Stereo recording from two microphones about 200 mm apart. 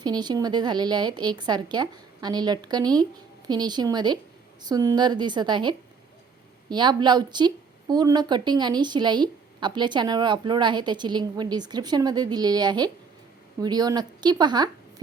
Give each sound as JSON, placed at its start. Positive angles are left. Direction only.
{"t": 0.0, "sound": "speech", "side_deg": -20}